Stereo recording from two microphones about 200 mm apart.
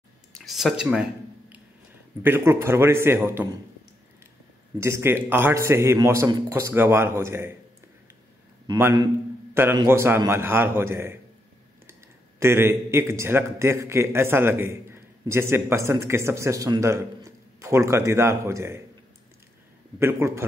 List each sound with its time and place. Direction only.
0.3 s speech: centre (ahead or behind)
2.2 s a man's voice: 10° right (ahead or behind)
4.7 s a man's voice: 15° right (ahead or behind)
8.6 s a man's voice: 10° right (ahead or behind)
20.0 s a man's voice: 10° right (ahead or behind)